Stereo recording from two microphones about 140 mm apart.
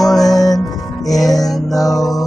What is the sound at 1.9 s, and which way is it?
Music, centre (ahead or behind).